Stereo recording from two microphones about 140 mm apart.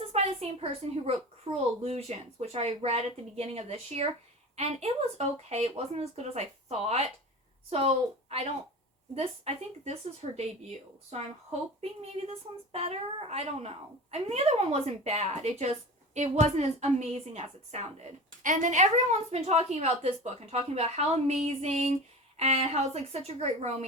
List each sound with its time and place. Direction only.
0.1 s a woman's voice: 45° right (ahead or behind)